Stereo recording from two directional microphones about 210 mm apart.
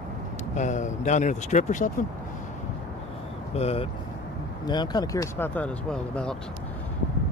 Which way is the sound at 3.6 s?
30° left (ahead or behind).